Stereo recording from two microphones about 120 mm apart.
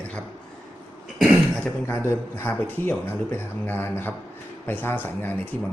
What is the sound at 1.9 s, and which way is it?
Speech, 20° left (ahead or behind).